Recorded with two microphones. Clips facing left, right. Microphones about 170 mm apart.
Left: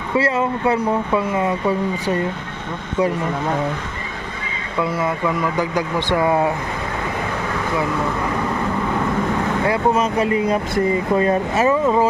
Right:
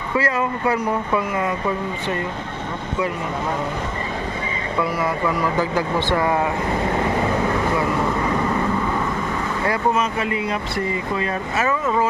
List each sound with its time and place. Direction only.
0.2 s speech: 25° left (ahead or behind)
4.9 s speech: 20° left (ahead or behind)
9.9 s speech: 40° left (ahead or behind)